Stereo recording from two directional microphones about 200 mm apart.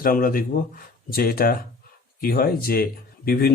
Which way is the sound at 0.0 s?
45° left (ahead or behind).